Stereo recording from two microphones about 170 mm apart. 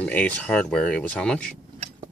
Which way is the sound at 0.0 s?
10° left (ahead or behind).